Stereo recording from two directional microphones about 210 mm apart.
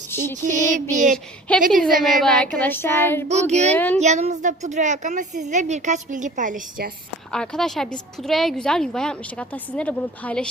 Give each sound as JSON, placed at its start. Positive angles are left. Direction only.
{"t": 0.1, "sound": "female singing", "side_deg": 10}
{"t": 0.5, "sound": "a woman's voice", "side_deg": -35}
{"t": 1.1, "sound": "a woman's voice", "side_deg": 5}
{"t": 3.0, "sound": "child singing", "side_deg": 10}
{"t": 3.2, "sound": "a woman's voice", "side_deg": -35}
{"t": 3.7, "sound": "child singing", "side_deg": 10}
{"t": 3.9, "sound": "a woman's voice", "side_deg": -30}
{"t": 7.3, "sound": "a woman's voice", "side_deg": 0}